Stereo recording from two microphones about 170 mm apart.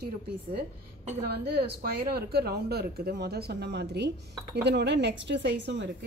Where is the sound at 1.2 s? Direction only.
70° right (ahead or behind).